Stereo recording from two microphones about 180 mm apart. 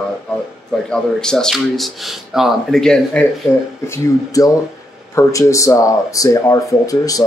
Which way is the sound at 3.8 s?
15° left (ahead or behind).